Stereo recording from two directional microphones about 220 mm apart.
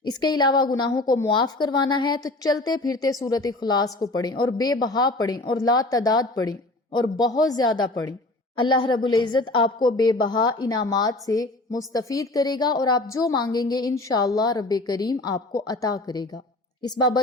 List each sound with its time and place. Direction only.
0.0 s a woman's voice: 20° left (ahead or behind)